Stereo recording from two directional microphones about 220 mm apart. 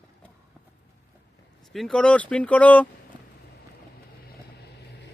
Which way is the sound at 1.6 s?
Centre (ahead or behind).